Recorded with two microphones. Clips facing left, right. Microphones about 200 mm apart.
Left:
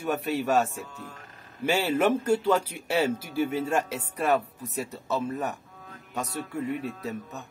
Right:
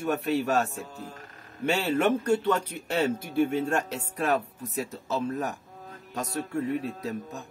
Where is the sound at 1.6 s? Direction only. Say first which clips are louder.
Left 1 dB; 5° left (ahead or behind).